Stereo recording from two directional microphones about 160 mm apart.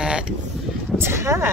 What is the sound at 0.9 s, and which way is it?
Speech, 15° right (ahead or behind).